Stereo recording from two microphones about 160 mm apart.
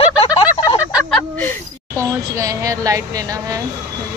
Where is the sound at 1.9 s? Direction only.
20° right (ahead or behind).